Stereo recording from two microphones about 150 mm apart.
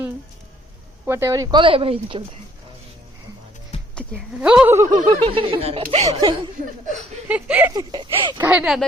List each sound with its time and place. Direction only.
1.0 s speech: 15° right (ahead or behind); by 2.2 s 35° right (ahead or behind)
4.4 s speech: 5° right (ahead or behind)
4.9 s speech: 30° right (ahead or behind)
7.3 s speech: 10° right (ahead or behind)
7.7 s speech: 30° right (ahead or behind)
8.4 s speech: 10° right (ahead or behind)